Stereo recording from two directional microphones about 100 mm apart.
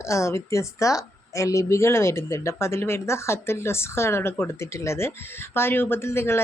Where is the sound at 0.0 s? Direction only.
30° left (ahead or behind).